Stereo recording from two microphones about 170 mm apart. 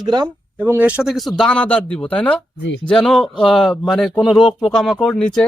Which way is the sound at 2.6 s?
90° left.